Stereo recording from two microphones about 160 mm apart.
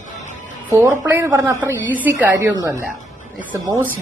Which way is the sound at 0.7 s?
15° right (ahead or behind).